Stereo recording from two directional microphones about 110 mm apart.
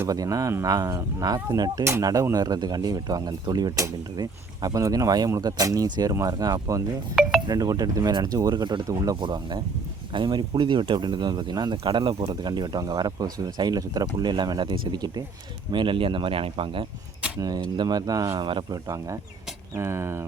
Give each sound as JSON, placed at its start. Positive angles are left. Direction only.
{"t": 0.1, "sound": "speech", "side_deg": -30}
{"t": 7.2, "sound": "speech", "side_deg": -5}
{"t": 7.4, "sound": "speech", "side_deg": -35}
{"t": 15.7, "sound": "speech", "side_deg": -50}
{"t": 17.7, "sound": "speech", "side_deg": -35}